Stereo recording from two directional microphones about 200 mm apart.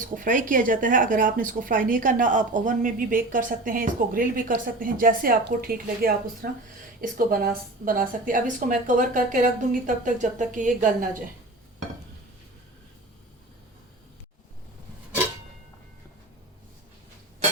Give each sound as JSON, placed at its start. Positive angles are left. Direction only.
{"t": 0.0, "sound": "a woman's voice", "side_deg": -40}